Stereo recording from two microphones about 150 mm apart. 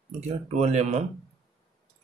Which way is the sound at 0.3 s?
45° right (ahead or behind).